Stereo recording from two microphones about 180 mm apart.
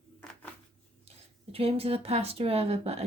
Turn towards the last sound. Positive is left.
turn(degrees=-35)  # may be behind; listen again after turning